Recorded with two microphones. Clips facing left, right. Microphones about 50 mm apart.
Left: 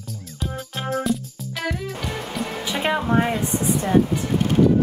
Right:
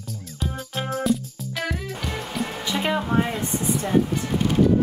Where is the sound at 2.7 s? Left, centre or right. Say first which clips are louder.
Left 1 dB; centre.